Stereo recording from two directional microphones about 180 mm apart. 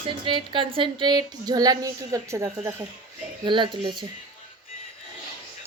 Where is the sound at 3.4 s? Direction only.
25° right (ahead or behind).